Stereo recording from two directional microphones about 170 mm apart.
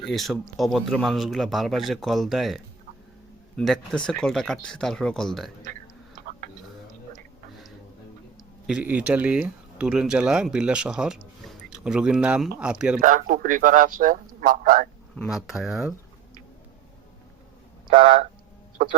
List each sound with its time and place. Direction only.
0.0 s speech: centre (ahead or behind)
3.6 s speech: centre (ahead or behind)
8.6 s speech: 10° right (ahead or behind)
13.0 s speech: 50° right (ahead or behind)
15.3 s speech: 5° right (ahead or behind)